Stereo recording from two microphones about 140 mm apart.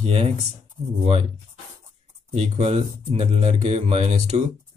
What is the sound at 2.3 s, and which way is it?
Speech, 45° right (ahead or behind).